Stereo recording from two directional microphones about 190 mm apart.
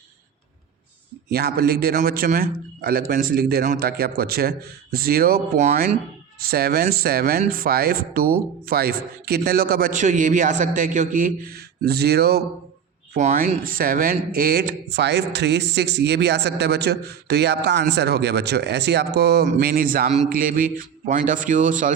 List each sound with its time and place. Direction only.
1.3 s speech: 55° right (ahead or behind)
6.4 s speech: 55° right (ahead or behind)
13.1 s speech: 45° right (ahead or behind)